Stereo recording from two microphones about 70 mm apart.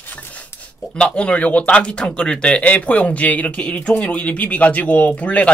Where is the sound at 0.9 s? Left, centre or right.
Centre.